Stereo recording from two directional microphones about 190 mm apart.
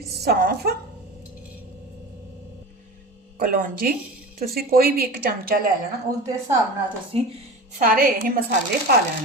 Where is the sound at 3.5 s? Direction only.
50° right (ahead or behind).